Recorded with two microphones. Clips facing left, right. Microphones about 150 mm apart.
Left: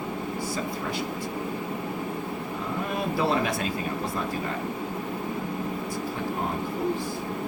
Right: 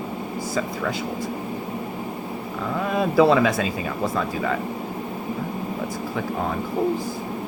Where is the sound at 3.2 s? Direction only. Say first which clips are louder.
Right 10 dB; 90° right.